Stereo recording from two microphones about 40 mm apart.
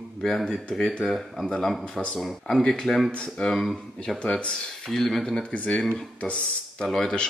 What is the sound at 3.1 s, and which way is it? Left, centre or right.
Speech, left.